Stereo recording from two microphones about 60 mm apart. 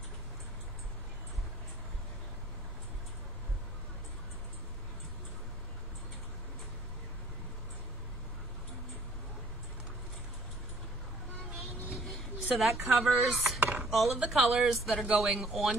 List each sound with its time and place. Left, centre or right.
12.5 s speech: centre
13.6 s chopping: right
13.8 s speech: centre